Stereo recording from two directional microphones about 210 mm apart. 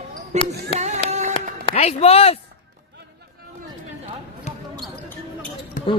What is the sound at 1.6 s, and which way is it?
Speech, 30° left (ahead or behind).